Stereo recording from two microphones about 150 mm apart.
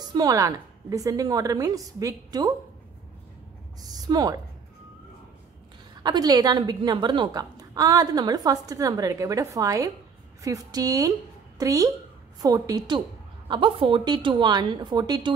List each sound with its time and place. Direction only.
0.0 s a woman's voice: 25° right (ahead or behind)
3.8 s a sound: 25° right (ahead or behind)
6.0 s a woman's voice: 25° right (ahead or behind)